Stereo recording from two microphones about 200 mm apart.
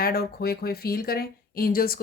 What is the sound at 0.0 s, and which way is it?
Speech, 50° left (ahead or behind).